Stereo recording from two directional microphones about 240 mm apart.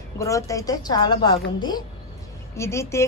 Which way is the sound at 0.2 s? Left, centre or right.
Centre.